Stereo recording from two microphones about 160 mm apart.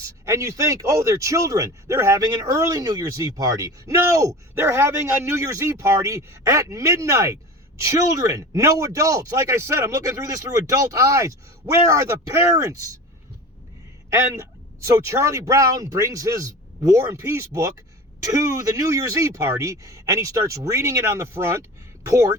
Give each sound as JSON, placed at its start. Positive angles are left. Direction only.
{"t": 0.3, "sound": "speech", "side_deg": -20}
{"t": 14.1, "sound": "speech", "side_deg": -15}